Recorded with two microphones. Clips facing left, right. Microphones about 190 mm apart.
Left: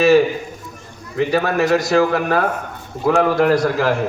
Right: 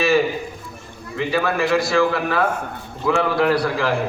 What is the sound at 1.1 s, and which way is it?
A man's voice, 40° left (ahead or behind).